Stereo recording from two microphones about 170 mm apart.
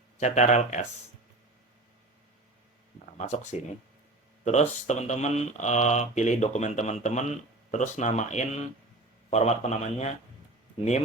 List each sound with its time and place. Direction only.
0.2 s speech: 45° left (ahead or behind)
3.2 s a man's voice: 45° left (ahead or behind)